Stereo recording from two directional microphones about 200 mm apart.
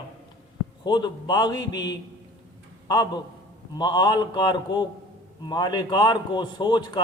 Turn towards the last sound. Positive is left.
turn(degrees=20)  # may be behind; listen again after turning